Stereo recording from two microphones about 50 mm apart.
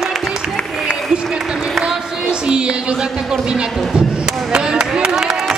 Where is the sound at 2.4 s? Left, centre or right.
Centre.